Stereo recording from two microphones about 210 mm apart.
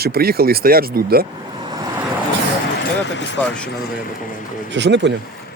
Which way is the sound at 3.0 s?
55° left (ahead or behind).